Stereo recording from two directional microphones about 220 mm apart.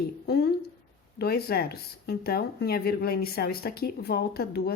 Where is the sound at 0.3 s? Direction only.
45° left (ahead or behind).